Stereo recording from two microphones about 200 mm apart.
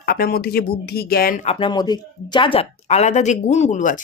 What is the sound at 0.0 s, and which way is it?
Speech, 50° left (ahead or behind).